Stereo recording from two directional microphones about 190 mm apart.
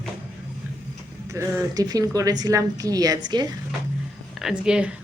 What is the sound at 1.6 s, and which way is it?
A woman's voice, 20° right (ahead or behind).